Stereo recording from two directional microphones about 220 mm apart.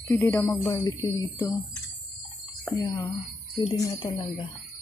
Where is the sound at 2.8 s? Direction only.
20° left (ahead or behind).